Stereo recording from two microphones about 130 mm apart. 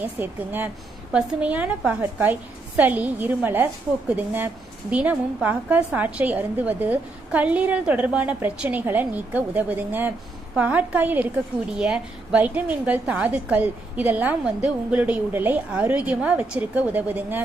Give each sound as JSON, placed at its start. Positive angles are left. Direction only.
{"t": 0.0, "sound": "a woman's voice", "side_deg": -15}
{"t": 4.9, "sound": "a woman's voice", "side_deg": -10}